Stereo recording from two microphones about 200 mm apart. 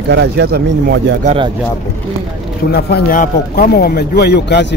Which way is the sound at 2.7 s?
45° left (ahead or behind).